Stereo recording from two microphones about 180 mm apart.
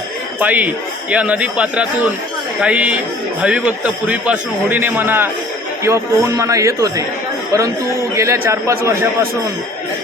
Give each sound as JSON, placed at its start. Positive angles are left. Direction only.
{"t": 0.3, "sound": "a man's voice", "side_deg": -10}
{"t": 8.1, "sound": "a man's voice", "side_deg": -15}